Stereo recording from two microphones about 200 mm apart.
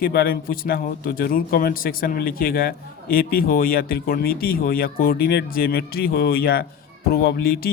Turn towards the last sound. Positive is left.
turn(degrees=50)  # may be behind; listen again after turning